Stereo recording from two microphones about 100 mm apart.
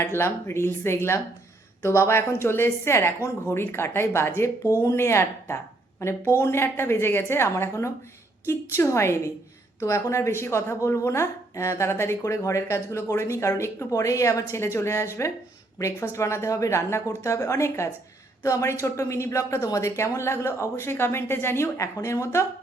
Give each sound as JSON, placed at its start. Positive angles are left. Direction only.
{"t": 0.0, "sound": "speech", "side_deg": 25}